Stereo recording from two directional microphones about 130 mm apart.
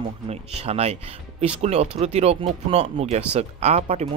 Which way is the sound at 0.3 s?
55° right (ahead or behind).